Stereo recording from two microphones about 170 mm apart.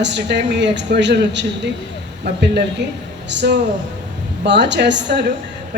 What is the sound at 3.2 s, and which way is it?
A woman's voice, 90° right.